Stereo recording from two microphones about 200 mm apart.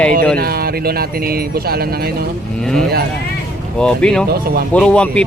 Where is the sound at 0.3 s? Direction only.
50° right (ahead or behind).